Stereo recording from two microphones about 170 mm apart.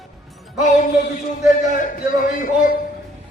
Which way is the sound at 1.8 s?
50° left (ahead or behind).